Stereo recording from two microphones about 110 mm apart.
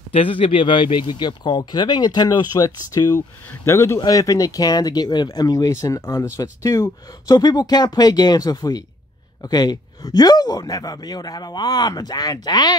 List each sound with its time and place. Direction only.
0.1 s speech: 55° left (ahead or behind); by 12.7 s 40° left (ahead or behind)